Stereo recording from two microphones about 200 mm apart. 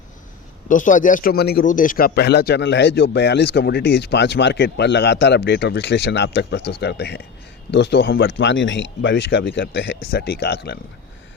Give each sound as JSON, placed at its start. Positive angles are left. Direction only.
{"t": 0.7, "sound": "a man's voice", "side_deg": 40}
{"t": 8.3, "sound": "a man's voice", "side_deg": 65}